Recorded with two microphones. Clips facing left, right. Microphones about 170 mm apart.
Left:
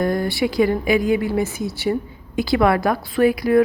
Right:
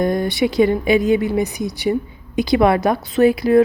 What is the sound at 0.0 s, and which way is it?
A woman's voice, 20° right (ahead or behind).